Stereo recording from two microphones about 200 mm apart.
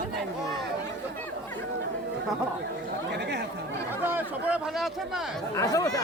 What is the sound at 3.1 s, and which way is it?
Chatter, 55° right (ahead or behind).